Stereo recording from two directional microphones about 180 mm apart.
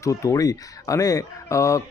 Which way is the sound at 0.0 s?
15° left (ahead or behind).